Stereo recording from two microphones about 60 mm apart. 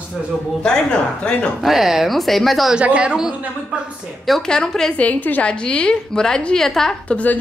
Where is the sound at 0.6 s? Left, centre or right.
Centre.